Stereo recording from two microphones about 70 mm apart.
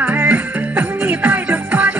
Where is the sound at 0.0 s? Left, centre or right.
Right.